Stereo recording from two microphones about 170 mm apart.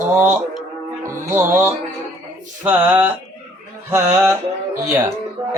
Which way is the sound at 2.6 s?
10° right (ahead or behind).